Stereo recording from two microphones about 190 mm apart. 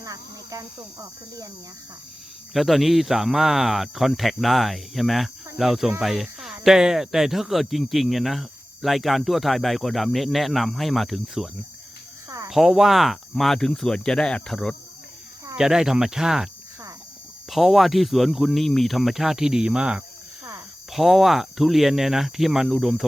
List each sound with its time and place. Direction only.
0.0 s cricket: 20° right (ahead or behind)
2.5 s speech: centre (ahead or behind)
12.5 s speech: centre (ahead or behind)
17.5 s speech: centre (ahead or behind)